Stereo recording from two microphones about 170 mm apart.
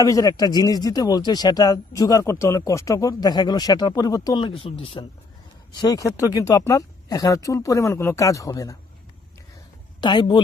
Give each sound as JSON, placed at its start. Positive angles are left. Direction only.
{"t": 0.0, "sound": "speech", "side_deg": 20}
{"t": 5.8, "sound": "speech", "side_deg": 20}
{"t": 10.0, "sound": "speech", "side_deg": 25}